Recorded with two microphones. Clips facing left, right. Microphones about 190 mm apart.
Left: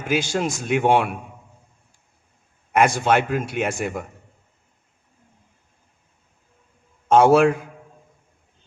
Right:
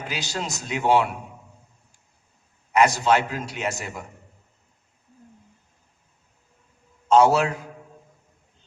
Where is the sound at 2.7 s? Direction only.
50° left (ahead or behind).